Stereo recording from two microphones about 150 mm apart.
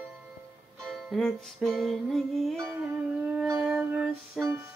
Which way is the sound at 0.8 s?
5° left (ahead or behind).